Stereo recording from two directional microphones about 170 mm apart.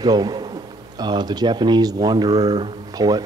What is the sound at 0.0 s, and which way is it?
A man's voice, 25° right (ahead or behind).